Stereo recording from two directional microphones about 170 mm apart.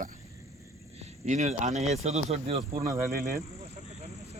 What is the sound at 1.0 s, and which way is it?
Speech, 45° right (ahead or behind).